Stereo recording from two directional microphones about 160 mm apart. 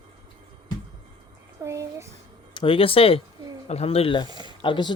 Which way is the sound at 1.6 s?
20° right (ahead or behind).